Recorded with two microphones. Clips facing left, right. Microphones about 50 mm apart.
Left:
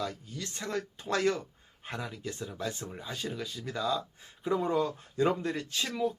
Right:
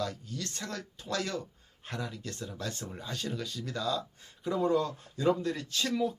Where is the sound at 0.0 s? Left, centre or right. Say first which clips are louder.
Right 1 dB; centre; by 1.4 s left.